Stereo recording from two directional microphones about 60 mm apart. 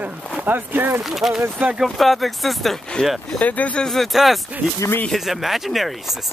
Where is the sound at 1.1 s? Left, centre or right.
Centre.